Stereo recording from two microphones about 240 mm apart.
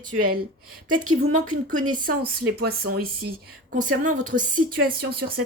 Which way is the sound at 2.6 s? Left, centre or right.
Right.